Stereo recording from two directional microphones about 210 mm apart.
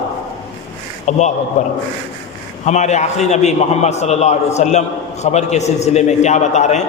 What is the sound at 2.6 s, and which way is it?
A man's voice, 35° left (ahead or behind).